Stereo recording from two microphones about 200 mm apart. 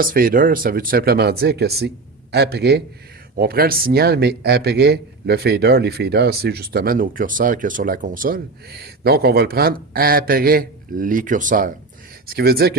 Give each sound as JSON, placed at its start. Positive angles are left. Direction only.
{"t": 0.0, "sound": "a man's voice", "side_deg": -45}